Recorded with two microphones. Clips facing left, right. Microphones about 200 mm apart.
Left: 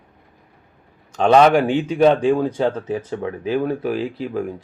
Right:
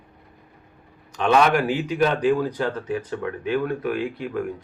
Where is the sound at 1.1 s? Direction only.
30° left (ahead or behind).